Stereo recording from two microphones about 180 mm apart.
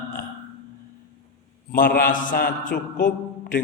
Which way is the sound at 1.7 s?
50° left (ahead or behind).